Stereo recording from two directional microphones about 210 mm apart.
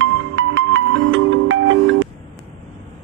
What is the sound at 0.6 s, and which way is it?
Music, 65° right (ahead or behind).